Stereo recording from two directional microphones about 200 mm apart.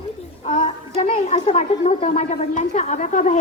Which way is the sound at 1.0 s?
30° left (ahead or behind).